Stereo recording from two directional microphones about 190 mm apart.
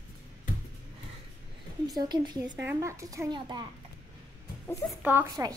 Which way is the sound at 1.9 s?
20° right (ahead or behind).